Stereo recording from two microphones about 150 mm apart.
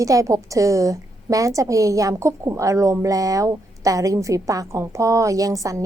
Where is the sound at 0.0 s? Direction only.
20° right (ahead or behind).